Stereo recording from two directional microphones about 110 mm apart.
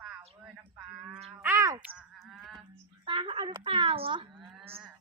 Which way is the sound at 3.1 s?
50° right (ahead or behind).